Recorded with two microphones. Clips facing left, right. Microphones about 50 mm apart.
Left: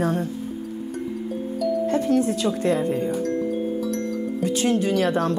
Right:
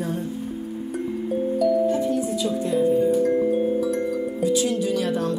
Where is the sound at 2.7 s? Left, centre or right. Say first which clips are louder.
Right 5 dB; left.